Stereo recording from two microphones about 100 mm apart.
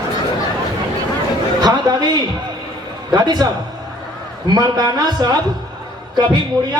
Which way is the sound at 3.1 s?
45° right (ahead or behind).